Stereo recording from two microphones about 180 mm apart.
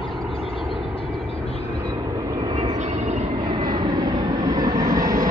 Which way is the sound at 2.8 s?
40° right (ahead or behind).